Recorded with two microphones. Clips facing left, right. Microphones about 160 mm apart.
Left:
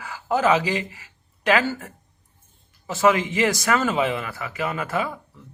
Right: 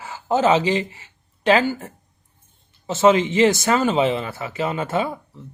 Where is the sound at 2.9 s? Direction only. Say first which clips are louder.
Right 4 dB; 25° right (ahead or behind).